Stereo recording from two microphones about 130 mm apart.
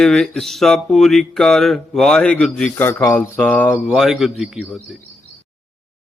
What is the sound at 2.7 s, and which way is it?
Speech, 15° left (ahead or behind).